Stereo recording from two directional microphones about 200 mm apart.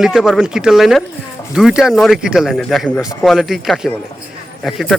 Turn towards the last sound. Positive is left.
turn(degrees=0)  # may be behind; listen again after turning